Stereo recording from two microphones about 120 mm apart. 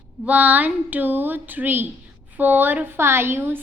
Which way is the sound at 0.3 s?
10° right (ahead or behind).